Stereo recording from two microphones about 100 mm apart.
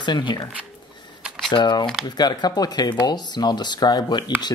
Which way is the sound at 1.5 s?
50° left (ahead or behind).